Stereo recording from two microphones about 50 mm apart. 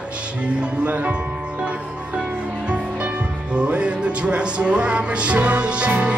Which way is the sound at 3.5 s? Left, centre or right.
Right.